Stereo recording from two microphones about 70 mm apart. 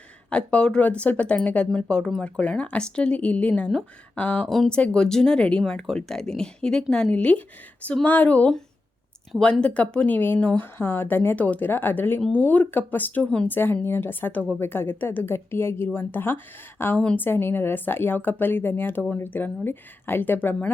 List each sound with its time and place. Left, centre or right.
0.3 s speech: centre
4.4 s speech: centre
10.2 s a woman's voice: left